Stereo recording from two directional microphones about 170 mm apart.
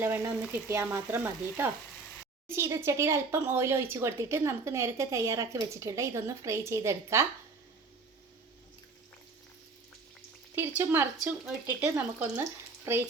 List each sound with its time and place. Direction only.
0.0 s speech: 10° right (ahead or behind)
10.5 s speech: 10° right (ahead or behind)